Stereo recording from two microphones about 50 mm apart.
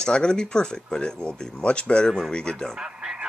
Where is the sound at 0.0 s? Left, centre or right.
Centre.